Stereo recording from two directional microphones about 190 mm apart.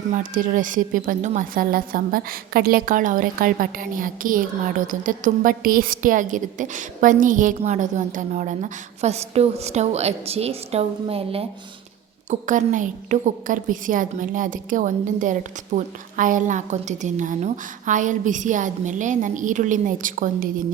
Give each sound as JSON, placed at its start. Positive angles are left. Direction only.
{"t": 0.1, "sound": "a woman's voice", "side_deg": -45}
{"t": 12.3, "sound": "a woman's voice", "side_deg": -40}